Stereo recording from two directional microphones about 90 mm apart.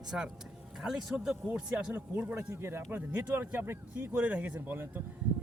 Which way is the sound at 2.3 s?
30° right (ahead or behind).